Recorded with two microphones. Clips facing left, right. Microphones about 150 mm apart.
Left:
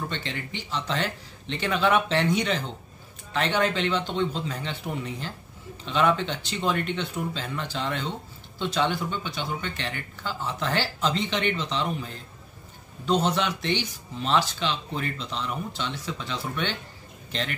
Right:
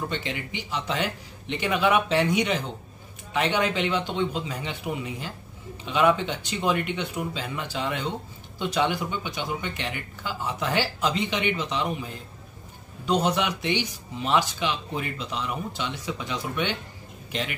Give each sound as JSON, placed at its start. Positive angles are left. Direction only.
{"t": 0.1, "sound": "a man's voice", "side_deg": -15}